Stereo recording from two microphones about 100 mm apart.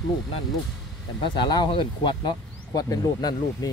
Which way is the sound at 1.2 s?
50° left (ahead or behind).